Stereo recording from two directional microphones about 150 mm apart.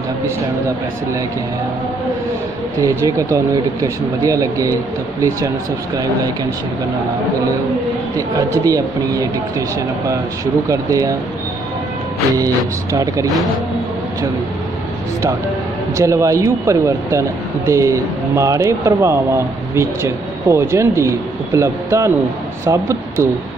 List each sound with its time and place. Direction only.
2.8 s speech: 20° right (ahead or behind)
8.4 s speech: 25° right (ahead or behind)
12.4 s speech: 20° right (ahead or behind)
16.0 s speech: 20° right (ahead or behind)